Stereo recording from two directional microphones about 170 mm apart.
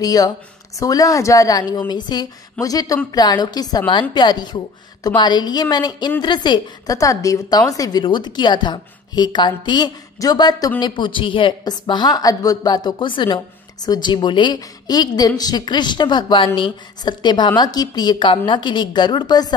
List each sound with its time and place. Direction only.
0.0 s a woman's voice: 20° left (ahead or behind)